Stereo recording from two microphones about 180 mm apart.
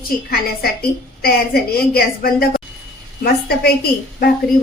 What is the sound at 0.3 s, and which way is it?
A woman's voice, 55° left (ahead or behind).